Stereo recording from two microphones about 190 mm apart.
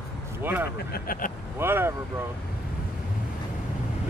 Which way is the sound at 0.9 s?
50° left (ahead or behind).